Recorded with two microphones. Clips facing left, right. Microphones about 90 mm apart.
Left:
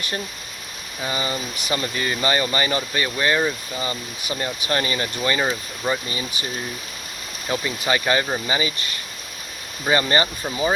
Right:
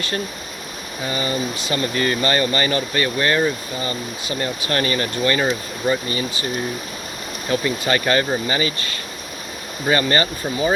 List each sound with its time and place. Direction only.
1.0 s speech: 20° left (ahead or behind)
7.5 s speech: 15° left (ahead or behind)